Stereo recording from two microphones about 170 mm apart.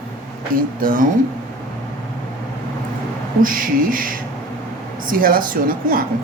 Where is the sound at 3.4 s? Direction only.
55° right (ahead or behind).